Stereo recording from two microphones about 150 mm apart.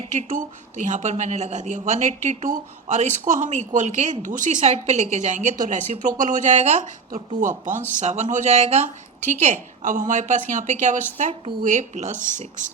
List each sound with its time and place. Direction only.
0.1 s speech: 60° right (ahead or behind)